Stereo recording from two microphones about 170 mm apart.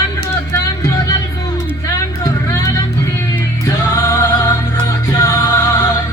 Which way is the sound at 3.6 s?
20° left (ahead or behind).